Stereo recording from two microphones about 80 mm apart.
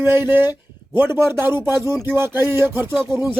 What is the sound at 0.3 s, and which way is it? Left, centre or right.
A man's voice, right.